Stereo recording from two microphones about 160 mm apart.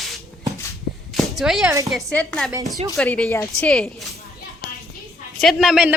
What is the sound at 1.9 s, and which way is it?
A woman's voice, centre (ahead or behind).